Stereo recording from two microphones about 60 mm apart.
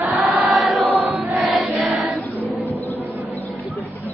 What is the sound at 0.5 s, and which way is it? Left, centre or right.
Choir, centre.